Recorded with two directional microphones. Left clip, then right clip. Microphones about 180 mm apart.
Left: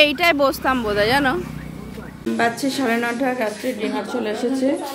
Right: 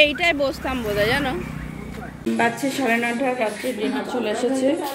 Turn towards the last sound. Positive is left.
turn(degrees=55)  # may be behind; listen again after turning